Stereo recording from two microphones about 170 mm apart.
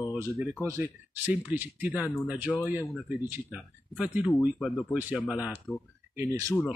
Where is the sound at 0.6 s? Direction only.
10° right (ahead or behind).